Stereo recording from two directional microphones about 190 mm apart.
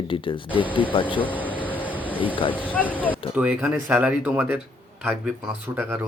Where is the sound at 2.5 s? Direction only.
10° left (ahead or behind).